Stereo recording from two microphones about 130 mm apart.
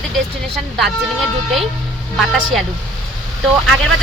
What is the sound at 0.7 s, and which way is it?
A woman's voice, centre (ahead or behind).